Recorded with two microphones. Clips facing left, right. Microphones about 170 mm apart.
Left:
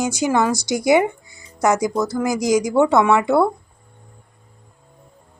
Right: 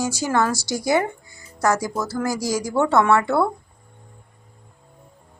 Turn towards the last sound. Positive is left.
turn(degrees=15)  # may be behind; listen again after turning